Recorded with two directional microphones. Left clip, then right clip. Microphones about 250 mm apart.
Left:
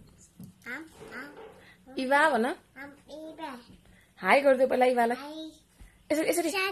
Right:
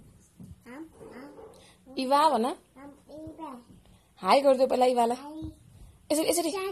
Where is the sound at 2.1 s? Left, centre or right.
Left.